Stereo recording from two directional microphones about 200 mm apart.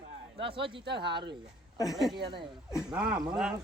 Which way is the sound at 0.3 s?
25° right (ahead or behind).